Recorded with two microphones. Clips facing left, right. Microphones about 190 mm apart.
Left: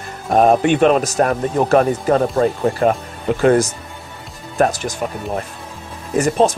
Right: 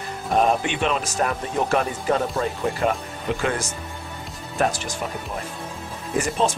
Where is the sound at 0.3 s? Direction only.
50° left (ahead or behind).